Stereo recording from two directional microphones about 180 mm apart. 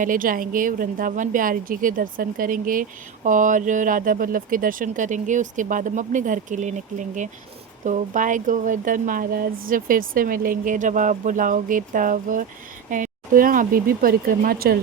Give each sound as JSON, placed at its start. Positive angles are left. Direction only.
{"t": 0.0, "sound": "speech", "side_deg": -50}